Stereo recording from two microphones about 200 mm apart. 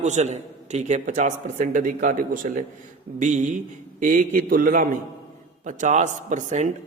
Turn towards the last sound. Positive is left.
turn(degrees=-35)  # may be behind; listen again after turning